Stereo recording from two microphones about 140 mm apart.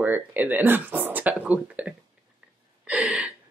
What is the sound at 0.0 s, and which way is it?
Speech, 15° right (ahead or behind).